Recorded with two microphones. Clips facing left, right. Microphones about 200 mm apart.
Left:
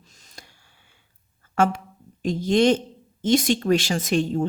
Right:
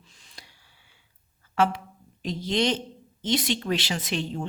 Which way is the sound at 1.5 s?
45° left (ahead or behind).